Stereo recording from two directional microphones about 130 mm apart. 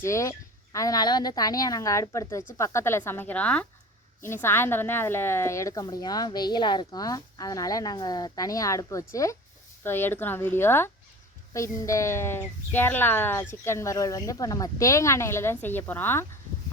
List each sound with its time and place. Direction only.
0.0 s a woman's voice: 25° left (ahead or behind)